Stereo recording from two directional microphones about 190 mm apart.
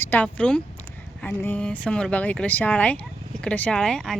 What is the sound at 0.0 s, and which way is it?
A woman's voice, 10° left (ahead or behind).